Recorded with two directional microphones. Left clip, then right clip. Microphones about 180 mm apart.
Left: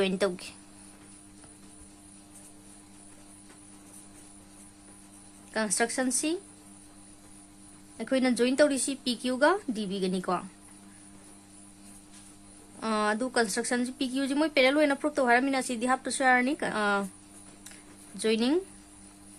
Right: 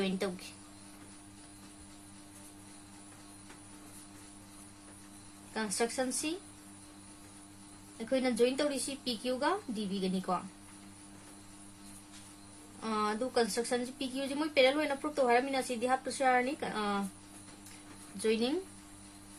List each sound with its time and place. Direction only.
0.0 s speech: 60° left (ahead or behind)
5.5 s speech: 60° left (ahead or behind)
7.9 s speech: 60° left (ahead or behind)
12.8 s speech: 60° left (ahead or behind)
18.2 s speech: 60° left (ahead or behind)